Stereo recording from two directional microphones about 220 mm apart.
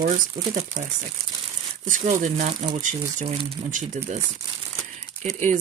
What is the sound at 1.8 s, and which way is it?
Speech, 35° right (ahead or behind).